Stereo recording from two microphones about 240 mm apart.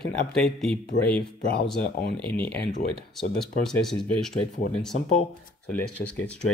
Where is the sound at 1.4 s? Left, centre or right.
Left.